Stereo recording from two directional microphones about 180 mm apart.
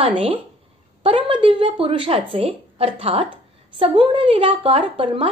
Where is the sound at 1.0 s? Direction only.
30° right (ahead or behind).